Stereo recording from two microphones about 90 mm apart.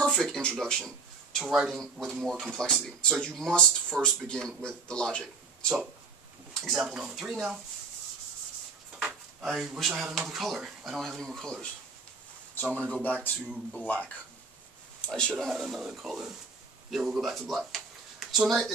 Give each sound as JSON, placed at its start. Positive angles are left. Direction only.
{"t": 0.0, "sound": "a man's voice", "side_deg": 5}
{"t": 9.0, "sound": "speech", "side_deg": -5}
{"t": 12.8, "sound": "a man's voice", "side_deg": 15}
{"t": 15.3, "sound": "speech", "side_deg": -5}